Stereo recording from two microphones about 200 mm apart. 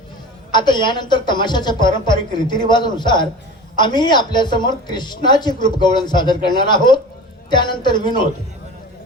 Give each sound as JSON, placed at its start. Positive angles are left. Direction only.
{"t": 0.5, "sound": "speech", "side_deg": 20}